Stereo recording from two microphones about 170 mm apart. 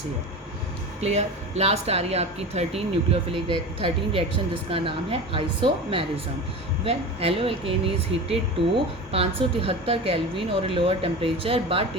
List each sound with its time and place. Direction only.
1.0 s speech: 40° right (ahead or behind)